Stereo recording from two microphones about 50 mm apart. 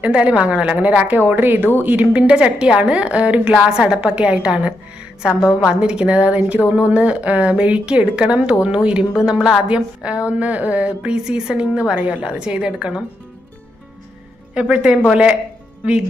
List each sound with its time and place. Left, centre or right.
0.0 s speech: right
1.2 s a woman's voice: right
2.0 s speech: right
11.9 s a woman's voice: right
12.2 s speech: right
14.5 s speech: right